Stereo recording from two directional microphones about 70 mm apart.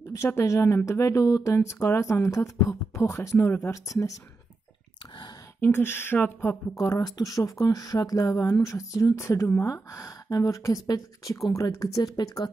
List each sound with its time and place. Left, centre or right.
0.3 s speech: left
3.3 s speech: left
3.7 s speech: left
5.6 s speech: left
6.7 s speech: left
7.0 s speech: left
12.0 s speech: left